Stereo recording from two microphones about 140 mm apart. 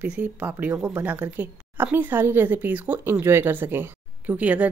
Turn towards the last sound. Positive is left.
turn(degrees=-10)  # may be behind; listen again after turning